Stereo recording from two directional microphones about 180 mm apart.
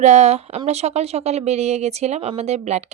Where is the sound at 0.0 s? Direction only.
40° right (ahead or behind).